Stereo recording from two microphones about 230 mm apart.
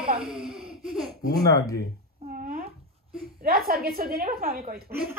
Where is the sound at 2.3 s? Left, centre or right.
Right.